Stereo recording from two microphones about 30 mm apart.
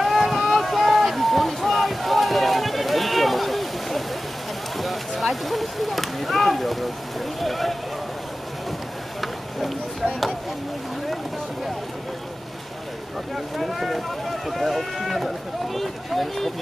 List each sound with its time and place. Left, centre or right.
0.0 s boat: centre
4.7 s a sound: centre
13.6 s speech: centre